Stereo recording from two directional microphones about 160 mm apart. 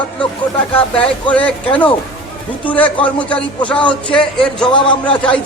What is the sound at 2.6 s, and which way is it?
Speech, 10° left (ahead or behind).